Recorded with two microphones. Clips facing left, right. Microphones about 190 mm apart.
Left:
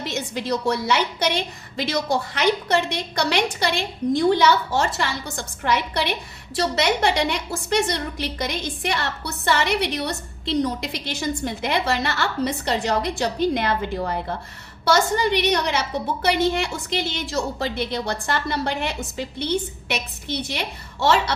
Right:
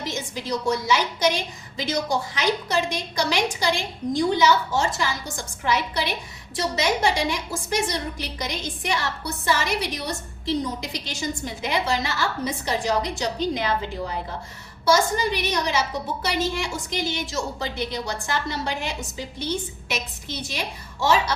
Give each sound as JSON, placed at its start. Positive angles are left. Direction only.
{"t": 0.0, "sound": "a woman's voice", "side_deg": 65}